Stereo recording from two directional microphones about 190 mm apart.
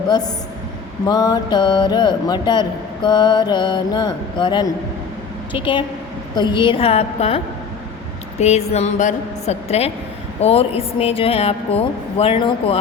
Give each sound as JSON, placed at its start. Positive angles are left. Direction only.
{"t": 1.0, "sound": "a woman's voice", "side_deg": 20}